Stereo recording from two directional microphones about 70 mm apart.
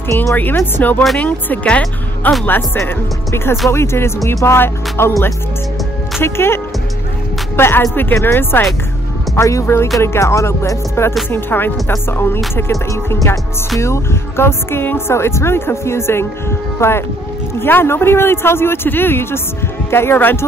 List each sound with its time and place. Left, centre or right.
0.1 s speech: left
0.6 s speech: left
2.8 s speech: left
6.2 s speech: left
9.3 s speech: left